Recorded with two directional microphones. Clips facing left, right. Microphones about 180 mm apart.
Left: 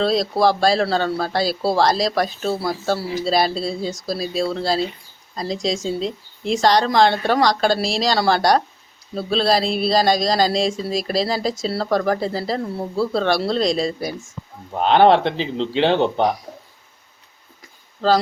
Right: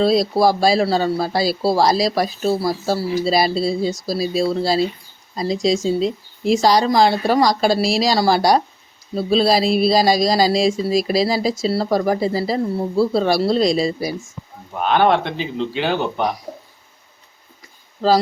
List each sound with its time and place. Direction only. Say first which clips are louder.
0.0 s speech: right 2 dB; 10° right (ahead or behind)
14.8 s speech: left 2 dB; 25° left (ahead or behind)